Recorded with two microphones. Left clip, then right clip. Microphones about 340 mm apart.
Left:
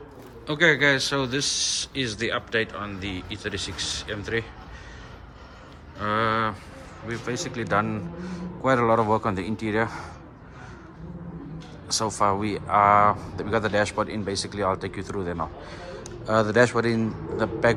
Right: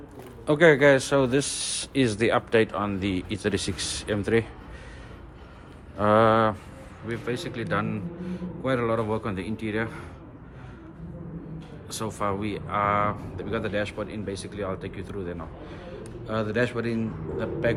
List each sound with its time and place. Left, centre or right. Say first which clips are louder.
0.4 s a man's voice: right 2 dB; centre
6.0 s a man's voice: right 4 dB; centre
7.1 s speech: even; centre
11.9 s speech: left 6 dB; centre